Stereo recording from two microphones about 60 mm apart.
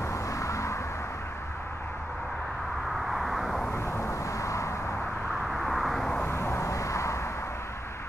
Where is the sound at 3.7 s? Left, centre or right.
Left.